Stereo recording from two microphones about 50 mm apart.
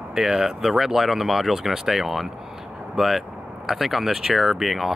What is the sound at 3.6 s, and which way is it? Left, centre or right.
Speech, centre.